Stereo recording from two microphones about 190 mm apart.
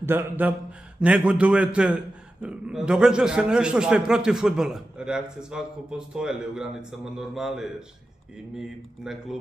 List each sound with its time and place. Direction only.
0.0 s a man's voice: 10° right (ahead or behind)
9.0 s a man's voice: centre (ahead or behind)